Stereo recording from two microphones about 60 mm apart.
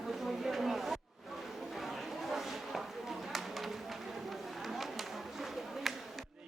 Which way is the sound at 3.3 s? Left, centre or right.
Centre.